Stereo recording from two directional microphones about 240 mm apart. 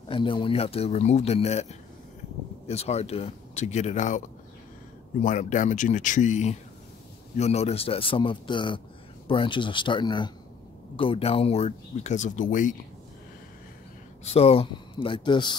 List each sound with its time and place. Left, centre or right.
0.1 s speech: left
5.2 s speech: left
14.2 s speech: left